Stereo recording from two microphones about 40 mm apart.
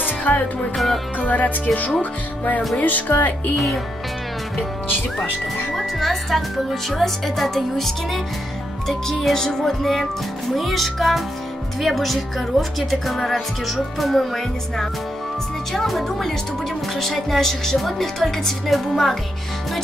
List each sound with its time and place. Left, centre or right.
0.0 s music: left
0.7 s speech: centre
1.2 s speech: left
5.8 s speech: centre
10.5 s speech: centre